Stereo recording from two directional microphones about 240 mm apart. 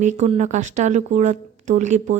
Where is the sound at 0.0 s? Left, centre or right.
Right.